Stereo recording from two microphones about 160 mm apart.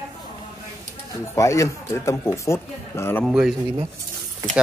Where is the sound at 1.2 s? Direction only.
20° left (ahead or behind).